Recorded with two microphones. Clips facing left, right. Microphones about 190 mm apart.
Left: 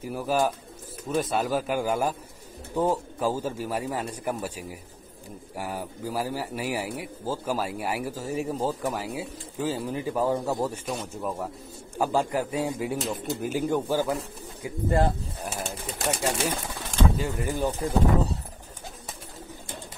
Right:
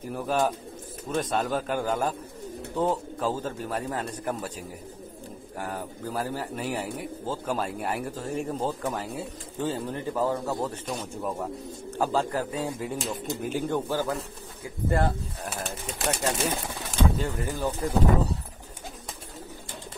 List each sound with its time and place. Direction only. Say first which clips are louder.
0.0 s speech: left 1 dB; 5° left (ahead or behind)
12.0 s speech: left 1 dB; 10° left (ahead or behind)
16.1 s speech: left 1 dB; 5° left (ahead or behind)
17.2 s speech: left 2 dB; 15° left (ahead or behind)